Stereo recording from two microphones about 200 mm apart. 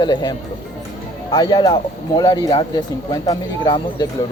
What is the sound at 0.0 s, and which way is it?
Speech, 20° left (ahead or behind).